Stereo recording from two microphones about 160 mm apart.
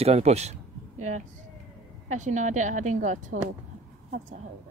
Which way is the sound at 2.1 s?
50° right (ahead or behind).